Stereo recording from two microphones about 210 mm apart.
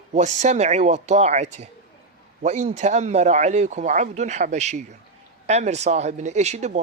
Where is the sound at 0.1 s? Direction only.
35° right (ahead or behind).